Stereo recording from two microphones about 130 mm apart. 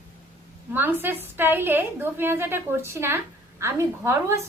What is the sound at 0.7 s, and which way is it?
A woman's voice, 15° right (ahead or behind).